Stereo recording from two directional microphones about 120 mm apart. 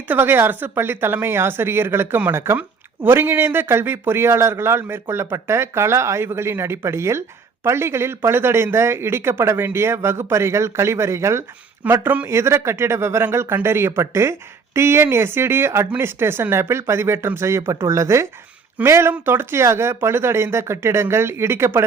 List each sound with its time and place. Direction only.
0.1 s speech: 20° right (ahead or behind)